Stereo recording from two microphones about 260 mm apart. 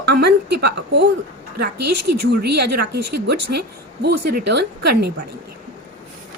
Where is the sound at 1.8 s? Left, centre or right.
Right.